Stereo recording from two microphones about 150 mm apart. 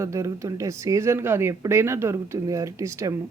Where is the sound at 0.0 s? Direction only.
20° right (ahead or behind).